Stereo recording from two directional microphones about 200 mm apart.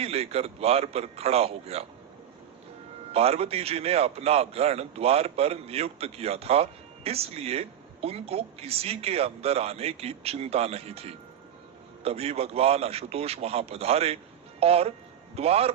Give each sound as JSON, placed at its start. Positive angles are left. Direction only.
{"t": 0.0, "sound": "a man's voice", "side_deg": -30}
{"t": 3.1, "sound": "a man's voice", "side_deg": -30}